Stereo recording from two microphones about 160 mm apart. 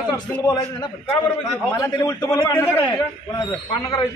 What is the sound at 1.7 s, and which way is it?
Speech, 25° left (ahead or behind).